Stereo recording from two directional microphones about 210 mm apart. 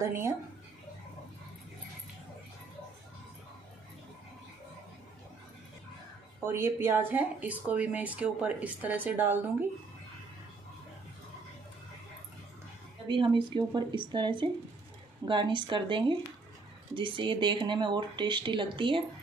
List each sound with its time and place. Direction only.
0.0 s speech: 10° right (ahead or behind)
6.4 s speech: 10° right (ahead or behind)
13.1 s speech: 25° right (ahead or behind)